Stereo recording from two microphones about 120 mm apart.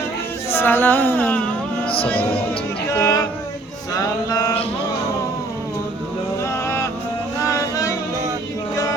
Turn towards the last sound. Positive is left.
turn(degrees=25)  # may be behind; listen again after turning